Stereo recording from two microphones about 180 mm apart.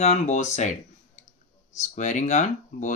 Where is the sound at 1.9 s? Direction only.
40° left (ahead or behind).